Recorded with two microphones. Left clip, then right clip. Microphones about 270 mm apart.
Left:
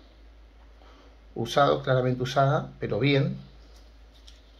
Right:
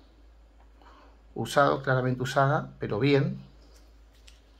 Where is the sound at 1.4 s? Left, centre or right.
Right.